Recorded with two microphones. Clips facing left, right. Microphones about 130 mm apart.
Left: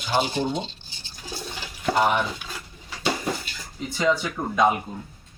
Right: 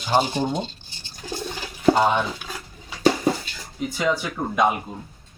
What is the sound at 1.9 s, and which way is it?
Speech, 25° right (ahead or behind).